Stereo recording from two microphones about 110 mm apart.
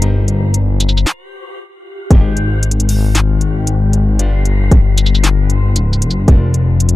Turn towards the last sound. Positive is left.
turn(degrees=0)  # may be behind; listen again after turning